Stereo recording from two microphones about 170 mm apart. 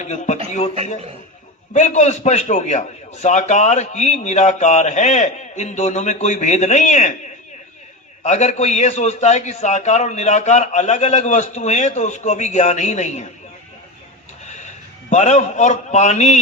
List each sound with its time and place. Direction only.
0.0 s a man's voice: 45° left (ahead or behind)
1.7 s a man's voice: 40° left (ahead or behind)
8.2 s a man's voice: 40° left (ahead or behind)
14.4 s music: 45° left (ahead or behind)
15.1 s a man's voice: 40° left (ahead or behind)